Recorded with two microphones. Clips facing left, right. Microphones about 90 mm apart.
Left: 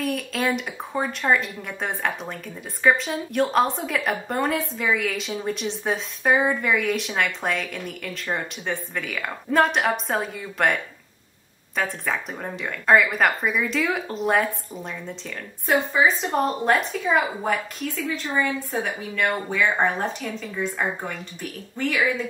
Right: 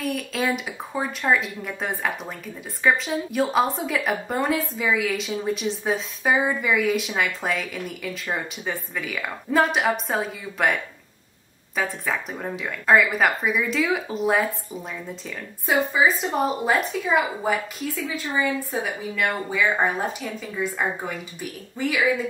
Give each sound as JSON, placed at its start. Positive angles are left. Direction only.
{"t": 0.0, "sound": "speech", "side_deg": 0}